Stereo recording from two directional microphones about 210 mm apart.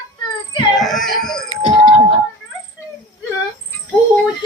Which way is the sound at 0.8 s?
Centre (ahead or behind).